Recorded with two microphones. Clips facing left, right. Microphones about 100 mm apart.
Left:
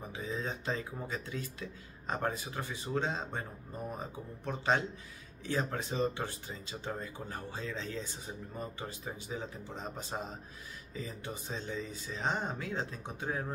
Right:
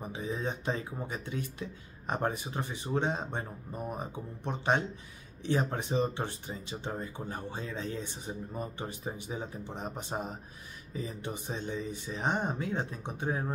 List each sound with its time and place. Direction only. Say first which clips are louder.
0.0 s speech: right 3 dB; 20° right (ahead or behind)
7.7 s speech: right 3 dB; 50° right (ahead or behind)
8.3 s speech: right 4 dB; 20° right (ahead or behind)